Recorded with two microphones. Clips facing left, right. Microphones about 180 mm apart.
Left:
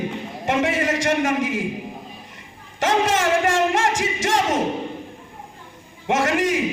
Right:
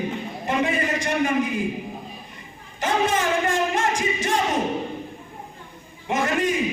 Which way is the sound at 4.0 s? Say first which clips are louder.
Left 2 dB; 90° left.